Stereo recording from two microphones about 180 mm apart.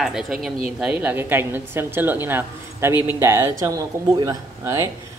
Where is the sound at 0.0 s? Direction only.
Centre (ahead or behind).